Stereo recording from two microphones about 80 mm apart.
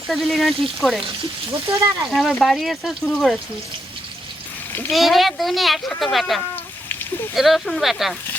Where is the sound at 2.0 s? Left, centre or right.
Centre.